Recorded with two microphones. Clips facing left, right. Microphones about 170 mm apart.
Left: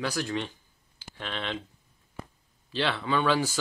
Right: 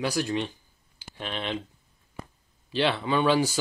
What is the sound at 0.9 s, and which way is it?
Clicking, 15° right (ahead or behind).